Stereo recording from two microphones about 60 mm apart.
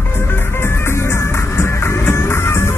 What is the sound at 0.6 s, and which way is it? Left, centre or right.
Music, left.